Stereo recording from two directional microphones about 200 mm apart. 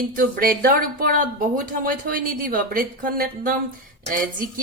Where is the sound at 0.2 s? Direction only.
45° right (ahead or behind).